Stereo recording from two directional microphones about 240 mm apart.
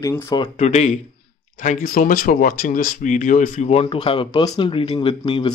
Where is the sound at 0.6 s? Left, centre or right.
Left.